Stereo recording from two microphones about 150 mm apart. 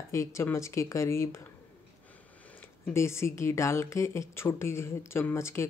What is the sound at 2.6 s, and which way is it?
Speech, 15° left (ahead or behind).